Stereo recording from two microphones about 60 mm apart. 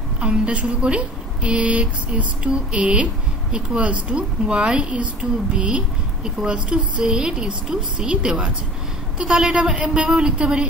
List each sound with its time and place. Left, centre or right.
0.2 s a woman's voice: centre